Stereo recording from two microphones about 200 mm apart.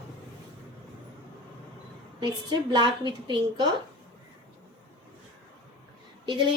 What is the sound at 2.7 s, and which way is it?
Speech, 20° right (ahead or behind).